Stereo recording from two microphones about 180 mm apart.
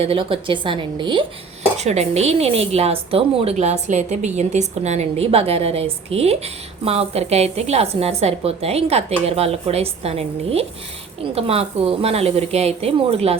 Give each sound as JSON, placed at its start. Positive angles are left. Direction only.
{"t": 0.0, "sound": "a woman's voice", "side_deg": -30}
{"t": 1.8, "sound": "a woman's voice", "side_deg": -40}